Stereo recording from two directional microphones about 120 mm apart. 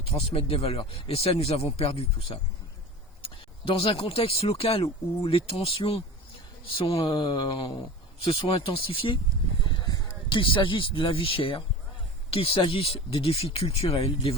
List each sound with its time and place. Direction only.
0.1 s speech: 50° left (ahead or behind)